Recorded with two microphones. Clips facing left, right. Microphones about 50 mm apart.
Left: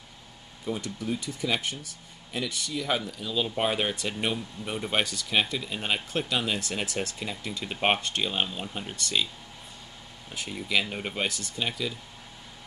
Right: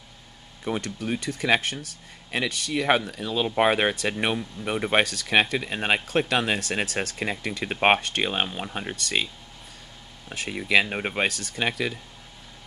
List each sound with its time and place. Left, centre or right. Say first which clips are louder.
0.7 s speech: right 3 dB; right
3.1 s speech: right 3 dB; right
5.0 s speech: right 5 dB; right
10.3 s speech: right 6 dB; right